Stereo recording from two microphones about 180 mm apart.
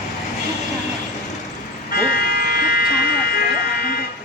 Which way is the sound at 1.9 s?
60° left (ahead or behind).